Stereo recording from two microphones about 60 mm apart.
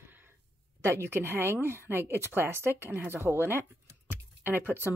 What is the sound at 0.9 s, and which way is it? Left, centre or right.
Speech, right.